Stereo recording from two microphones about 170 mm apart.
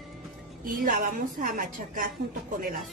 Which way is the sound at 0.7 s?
55° right (ahead or behind).